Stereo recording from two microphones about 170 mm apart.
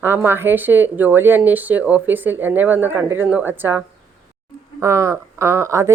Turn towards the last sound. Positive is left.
turn(degrees=-15)  # may be behind; listen again after turning